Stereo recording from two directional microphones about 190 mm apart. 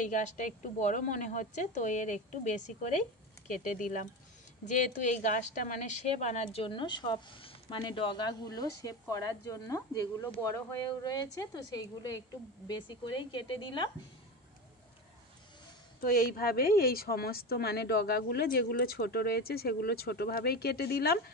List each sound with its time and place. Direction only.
0.0 s a woman's voice: 40° left (ahead or behind); by 13.8 s 25° left (ahead or behind)
16.0 s a woman's voice: 50° left (ahead or behind)